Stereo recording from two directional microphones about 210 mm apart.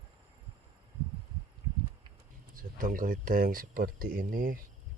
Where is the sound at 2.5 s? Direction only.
40° right (ahead or behind).